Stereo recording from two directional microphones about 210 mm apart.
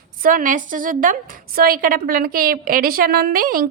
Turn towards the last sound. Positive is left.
turn(degrees=-40)  # may be behind; listen again after turning